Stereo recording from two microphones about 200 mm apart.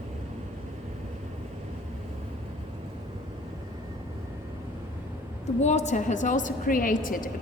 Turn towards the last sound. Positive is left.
turn(degrees=45)  # may be behind; listen again after turning